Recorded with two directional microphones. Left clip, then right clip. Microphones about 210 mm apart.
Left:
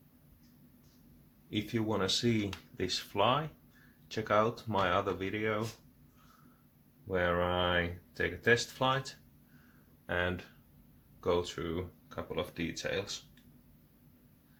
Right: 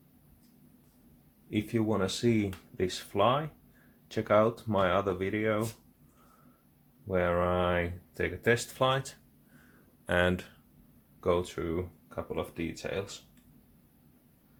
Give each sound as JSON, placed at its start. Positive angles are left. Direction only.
{"t": 1.5, "sound": "speech", "side_deg": -30}
{"t": 7.1, "sound": "speech", "side_deg": -30}
{"t": 11.2, "sound": "speech", "side_deg": -35}